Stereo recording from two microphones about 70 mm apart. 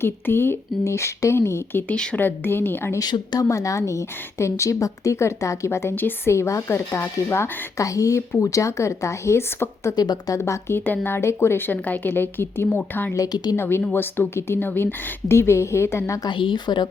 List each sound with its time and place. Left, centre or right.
0.0 s speech: left
1.9 s speech: centre
2.1 s speech: left
3.0 s speech: left
3.4 s speech: left
5.9 s a woman's voice: left
6.3 s speech: left
7.9 s speech: left
9.9 s speech: left
10.3 s speech: left
10.8 s speech: left
13.1 s speech: left
13.6 s speech: left
16.2 s a woman's voice: left